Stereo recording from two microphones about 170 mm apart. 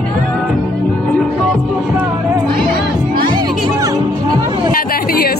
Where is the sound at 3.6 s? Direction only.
20° right (ahead or behind).